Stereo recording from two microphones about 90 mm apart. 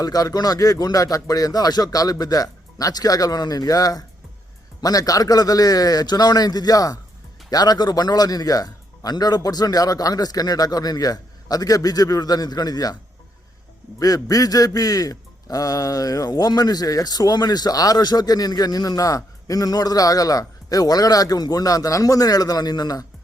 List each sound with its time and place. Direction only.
0.0 s a man's voice: 45° left (ahead or behind)
14.0 s a man's voice: 40° left (ahead or behind)